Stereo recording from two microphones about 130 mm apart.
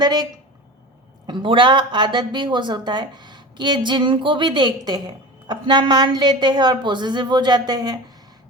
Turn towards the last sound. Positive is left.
turn(degrees=-30)  # may be behind; listen again after turning